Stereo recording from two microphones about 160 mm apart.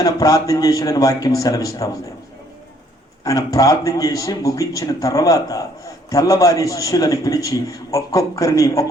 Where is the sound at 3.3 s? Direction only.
20° left (ahead or behind).